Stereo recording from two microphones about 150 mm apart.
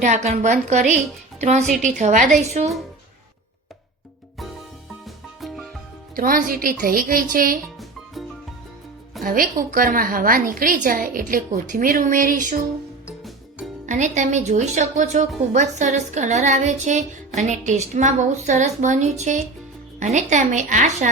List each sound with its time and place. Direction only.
0.0 s a woman's voice: 50° right (ahead or behind)
5.0 s music: centre (ahead or behind)
6.1 s a woman's voice: 70° right (ahead or behind)
9.2 s a woman's voice: 70° right (ahead or behind)
13.8 s speech: 55° right (ahead or behind)